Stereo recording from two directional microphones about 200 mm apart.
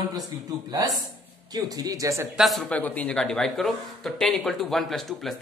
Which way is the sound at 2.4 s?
Centre (ahead or behind).